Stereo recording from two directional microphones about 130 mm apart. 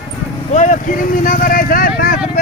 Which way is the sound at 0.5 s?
70° left (ahead or behind).